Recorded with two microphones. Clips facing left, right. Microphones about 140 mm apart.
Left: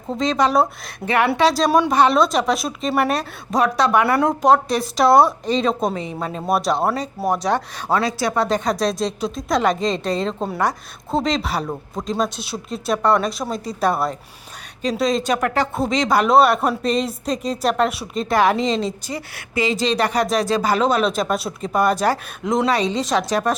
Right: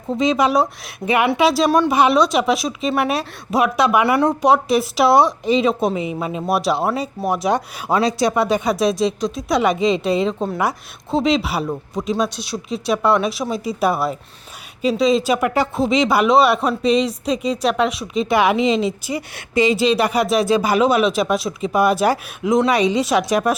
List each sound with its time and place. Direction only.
0.2 s speech: 10° right (ahead or behind)
1.0 s speech: 15° right (ahead or behind)
7.4 s speech: 15° right (ahead or behind)
8.3 s speech: 5° right (ahead or behind)